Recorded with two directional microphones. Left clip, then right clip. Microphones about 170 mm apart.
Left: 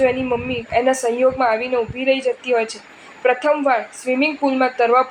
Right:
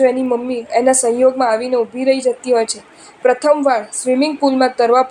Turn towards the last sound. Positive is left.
turn(degrees=-40)  # may be behind; listen again after turning